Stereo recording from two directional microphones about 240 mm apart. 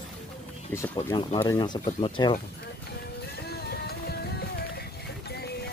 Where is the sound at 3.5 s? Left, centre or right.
Left.